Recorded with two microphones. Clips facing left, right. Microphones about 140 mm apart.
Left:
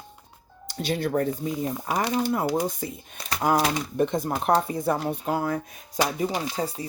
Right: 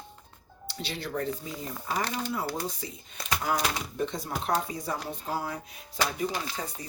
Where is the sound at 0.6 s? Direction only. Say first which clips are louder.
Left 9 dB; 50° left (ahead or behind).